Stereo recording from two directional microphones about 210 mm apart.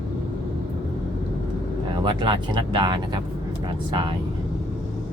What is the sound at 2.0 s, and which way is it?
Speech, 20° right (ahead or behind).